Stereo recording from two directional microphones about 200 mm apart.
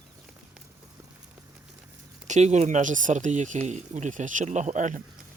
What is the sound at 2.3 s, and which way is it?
Speech, 35° right (ahead or behind).